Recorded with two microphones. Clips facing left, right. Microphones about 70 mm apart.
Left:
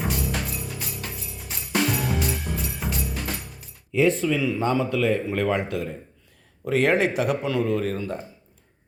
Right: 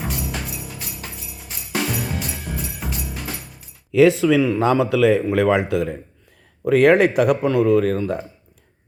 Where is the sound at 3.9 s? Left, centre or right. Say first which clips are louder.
Right 7 dB; right.